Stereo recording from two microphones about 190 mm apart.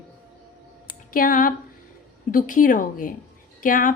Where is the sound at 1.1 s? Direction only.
45° left (ahead or behind).